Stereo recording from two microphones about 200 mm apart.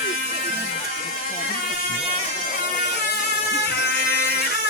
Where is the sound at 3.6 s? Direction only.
55° left (ahead or behind).